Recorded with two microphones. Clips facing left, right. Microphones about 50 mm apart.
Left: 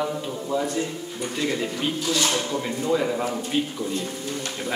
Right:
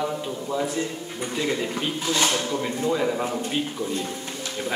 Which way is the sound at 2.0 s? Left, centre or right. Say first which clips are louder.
Right 1 dB; right.